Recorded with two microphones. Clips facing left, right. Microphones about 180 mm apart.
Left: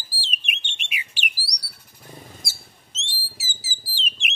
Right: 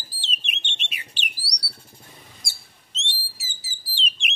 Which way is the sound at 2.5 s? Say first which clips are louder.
Left 3 dB; centre (ahead or behind).